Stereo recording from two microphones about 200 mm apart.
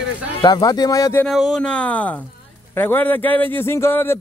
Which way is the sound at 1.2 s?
Centre (ahead or behind).